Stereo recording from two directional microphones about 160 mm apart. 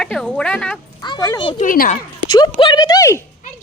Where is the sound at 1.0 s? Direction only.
25° left (ahead or behind).